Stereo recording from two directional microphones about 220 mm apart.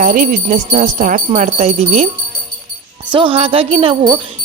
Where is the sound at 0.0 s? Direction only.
35° right (ahead or behind).